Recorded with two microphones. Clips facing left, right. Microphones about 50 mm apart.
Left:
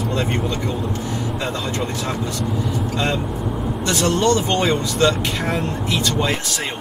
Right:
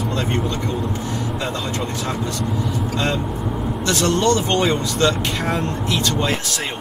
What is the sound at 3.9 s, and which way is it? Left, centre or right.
Speech, centre.